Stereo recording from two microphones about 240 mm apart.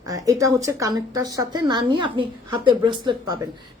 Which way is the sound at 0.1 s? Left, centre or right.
Centre.